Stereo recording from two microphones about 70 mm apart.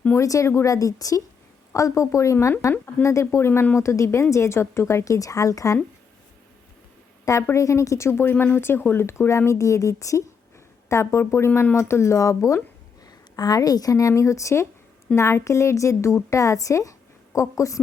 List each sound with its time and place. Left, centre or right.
0.1 s a woman's voice: left
7.5 s a woman's voice: left
13.1 s a woman's voice: left
14.1 s a woman's voice: left